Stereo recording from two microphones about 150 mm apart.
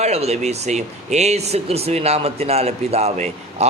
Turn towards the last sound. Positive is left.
turn(degrees=-45)  # may be behind; listen again after turning